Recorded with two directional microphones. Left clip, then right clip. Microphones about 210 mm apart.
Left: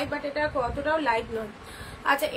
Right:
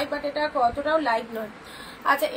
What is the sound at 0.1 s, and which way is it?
A woman's voice, 15° left (ahead or behind).